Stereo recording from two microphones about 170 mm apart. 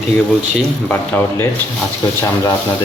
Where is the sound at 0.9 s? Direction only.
10° left (ahead or behind).